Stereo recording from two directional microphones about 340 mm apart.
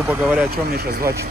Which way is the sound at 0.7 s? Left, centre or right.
Right.